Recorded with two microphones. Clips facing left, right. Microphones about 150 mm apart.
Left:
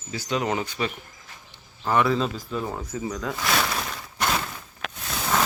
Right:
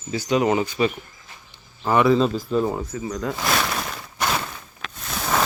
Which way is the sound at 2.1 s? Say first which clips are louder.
Right 7 dB; 30° right (ahead or behind).